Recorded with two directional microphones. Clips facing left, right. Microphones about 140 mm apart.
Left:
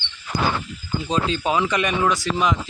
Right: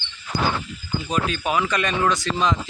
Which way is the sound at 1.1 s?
25° left (ahead or behind).